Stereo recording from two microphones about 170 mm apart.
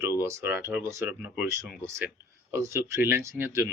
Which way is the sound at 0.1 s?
15° right (ahead or behind).